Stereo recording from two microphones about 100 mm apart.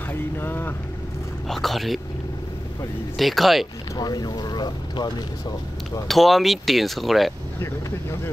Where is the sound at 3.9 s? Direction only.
40° left (ahead or behind).